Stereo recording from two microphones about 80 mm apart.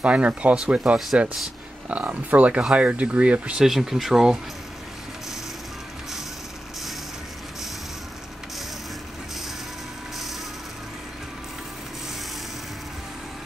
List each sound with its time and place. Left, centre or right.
0.0 s speech: centre
3.6 s speech: centre